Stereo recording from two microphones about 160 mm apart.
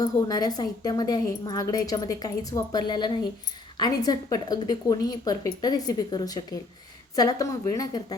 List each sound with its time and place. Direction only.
0.0 s a woman's voice: 25° left (ahead or behind)